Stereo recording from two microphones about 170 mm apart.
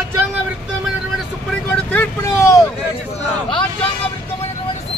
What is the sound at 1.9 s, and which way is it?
Speech, 15° left (ahead or behind).